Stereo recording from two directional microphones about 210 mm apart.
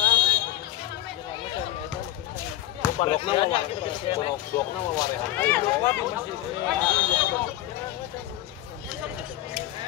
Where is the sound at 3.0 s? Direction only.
25° left (ahead or behind).